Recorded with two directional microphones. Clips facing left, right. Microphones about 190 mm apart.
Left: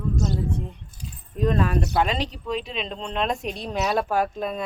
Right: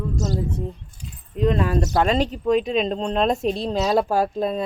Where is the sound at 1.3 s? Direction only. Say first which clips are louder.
Right 2 dB; 20° right (ahead or behind).